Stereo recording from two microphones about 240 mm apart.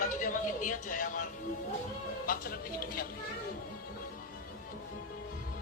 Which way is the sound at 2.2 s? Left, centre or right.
Left.